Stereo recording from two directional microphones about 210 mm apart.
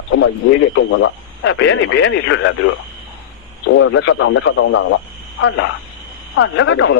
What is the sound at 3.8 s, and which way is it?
Speech, 70° left (ahead or behind).